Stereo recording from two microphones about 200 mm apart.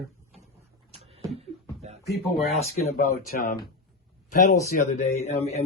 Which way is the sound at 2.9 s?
45° left (ahead or behind).